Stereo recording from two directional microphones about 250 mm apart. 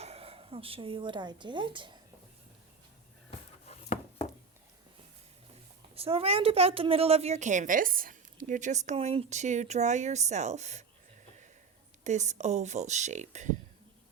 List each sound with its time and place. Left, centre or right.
0.0 s a woman's voice: right
3.7 s a sound: left
5.9 s a woman's voice: right
12.0 s a woman's voice: right